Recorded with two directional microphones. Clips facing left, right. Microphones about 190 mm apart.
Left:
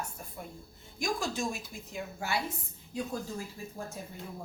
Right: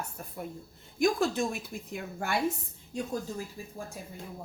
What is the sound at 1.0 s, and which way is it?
A woman's voice, 60° right (ahead or behind).